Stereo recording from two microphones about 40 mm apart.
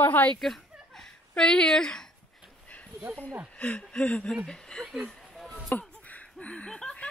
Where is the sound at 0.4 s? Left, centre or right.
Centre.